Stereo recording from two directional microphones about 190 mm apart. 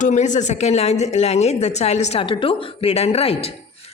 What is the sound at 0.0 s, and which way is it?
A woman's voice, 40° left (ahead or behind).